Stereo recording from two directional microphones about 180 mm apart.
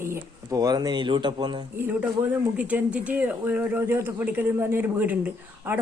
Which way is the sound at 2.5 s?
10° right (ahead or behind).